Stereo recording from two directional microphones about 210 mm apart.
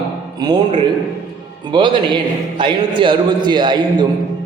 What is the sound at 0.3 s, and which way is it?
Speech, 20° right (ahead or behind).